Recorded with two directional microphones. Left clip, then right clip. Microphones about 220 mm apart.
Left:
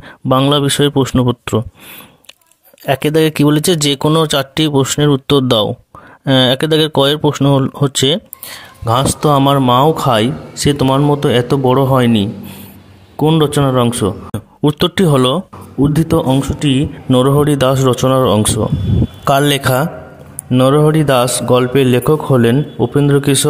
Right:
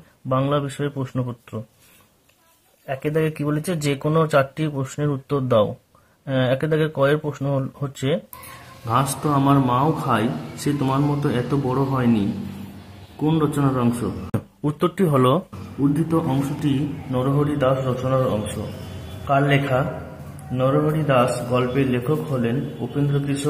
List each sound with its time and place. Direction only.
0.3 s a man's voice: 45° left (ahead or behind)
2.9 s a man's voice: 45° left (ahead or behind)
13.2 s a man's voice: 40° left (ahead or behind)
17.1 s a man's voice: 50° left (ahead or behind)